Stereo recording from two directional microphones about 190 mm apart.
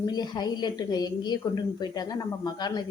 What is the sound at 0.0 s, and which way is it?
A woman's voice, 20° left (ahead or behind).